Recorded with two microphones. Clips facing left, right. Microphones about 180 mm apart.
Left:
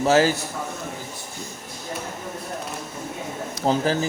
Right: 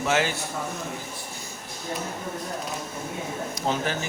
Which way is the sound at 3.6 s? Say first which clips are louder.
Left 6 dB; 35° left (ahead or behind).